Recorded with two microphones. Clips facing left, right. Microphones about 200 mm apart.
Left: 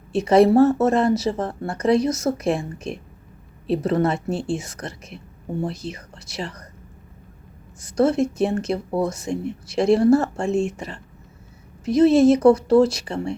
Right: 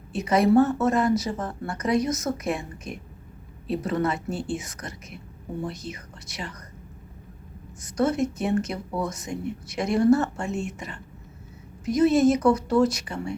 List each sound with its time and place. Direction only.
0.1 s speech: 30° left (ahead or behind)
4.3 s speech: 90° left
4.5 s speech: 30° left (ahead or behind)
7.8 s speech: 30° left (ahead or behind)